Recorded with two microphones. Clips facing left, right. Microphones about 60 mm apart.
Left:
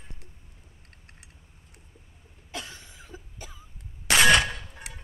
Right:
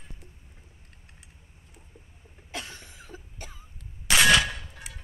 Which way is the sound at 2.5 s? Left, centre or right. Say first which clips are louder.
Even; centre.